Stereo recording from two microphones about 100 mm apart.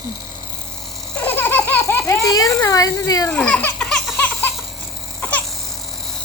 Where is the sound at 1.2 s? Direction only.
20° left (ahead or behind).